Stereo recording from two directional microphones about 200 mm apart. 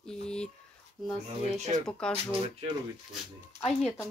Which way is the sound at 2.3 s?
25° right (ahead or behind).